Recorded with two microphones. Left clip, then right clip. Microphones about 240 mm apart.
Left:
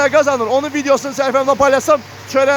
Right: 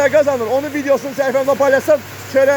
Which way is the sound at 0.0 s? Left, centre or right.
Centre.